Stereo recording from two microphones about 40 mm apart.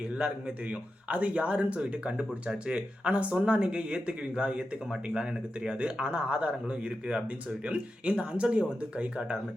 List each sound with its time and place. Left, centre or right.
0.0 s a man's voice: right